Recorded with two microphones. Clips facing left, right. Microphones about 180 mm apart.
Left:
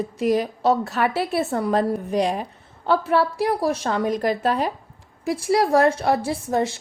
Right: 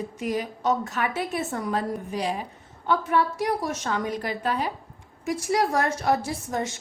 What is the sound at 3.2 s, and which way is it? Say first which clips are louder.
A woman's voice: left 4 dB; 30° left (ahead or behind).